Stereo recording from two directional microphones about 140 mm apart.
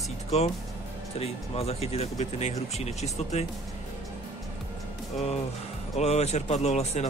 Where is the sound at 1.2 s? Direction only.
45° left (ahead or behind).